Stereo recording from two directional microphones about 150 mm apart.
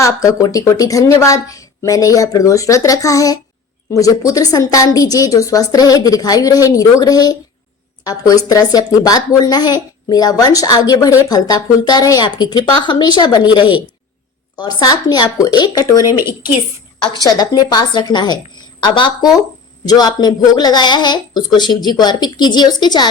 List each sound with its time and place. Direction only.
0.0 s a woman's voice: 20° left (ahead or behind)
17.2 s a woman's voice: 25° left (ahead or behind)